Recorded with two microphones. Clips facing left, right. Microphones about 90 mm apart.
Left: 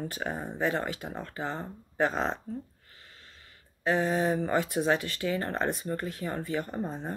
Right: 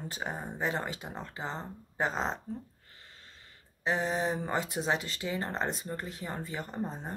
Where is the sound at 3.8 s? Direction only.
20° right (ahead or behind).